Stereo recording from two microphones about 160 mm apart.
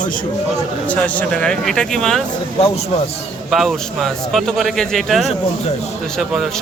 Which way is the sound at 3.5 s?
Centre (ahead or behind).